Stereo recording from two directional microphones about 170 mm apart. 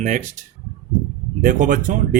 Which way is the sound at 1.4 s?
50° right (ahead or behind).